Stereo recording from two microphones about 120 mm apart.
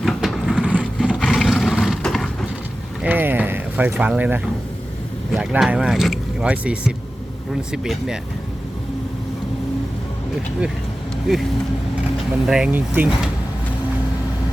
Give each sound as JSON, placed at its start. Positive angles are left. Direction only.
{"t": 0.0, "sound": "vehicle", "side_deg": 0}
{"t": 1.2, "sound": "roar", "side_deg": 0}
{"t": 3.0, "sound": "a sound", "side_deg": -15}
{"t": 5.3, "sound": "speech", "side_deg": -5}
{"t": 11.3, "sound": "speech", "side_deg": -5}
{"t": 12.5, "sound": "speech", "side_deg": -5}